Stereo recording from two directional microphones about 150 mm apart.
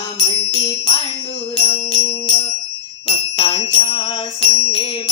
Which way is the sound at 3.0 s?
35° left (ahead or behind).